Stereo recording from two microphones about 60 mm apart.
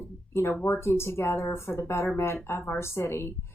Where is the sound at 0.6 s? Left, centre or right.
Left.